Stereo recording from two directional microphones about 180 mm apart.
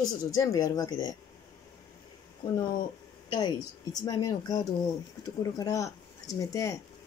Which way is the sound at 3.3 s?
20° left (ahead or behind).